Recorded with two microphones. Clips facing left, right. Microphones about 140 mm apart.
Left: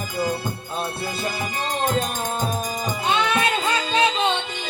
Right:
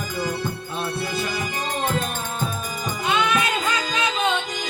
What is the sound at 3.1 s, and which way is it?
Music, 30° left (ahead or behind).